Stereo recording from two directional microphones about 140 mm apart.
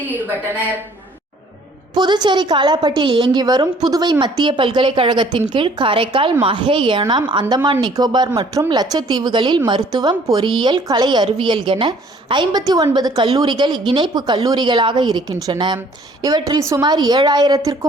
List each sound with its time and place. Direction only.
2.0 s a woman's voice: 30° right (ahead or behind)